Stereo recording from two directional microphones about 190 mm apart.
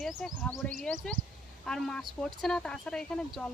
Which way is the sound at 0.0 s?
Centre (ahead or behind).